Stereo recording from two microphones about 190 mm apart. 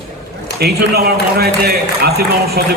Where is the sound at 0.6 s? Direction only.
55° right (ahead or behind).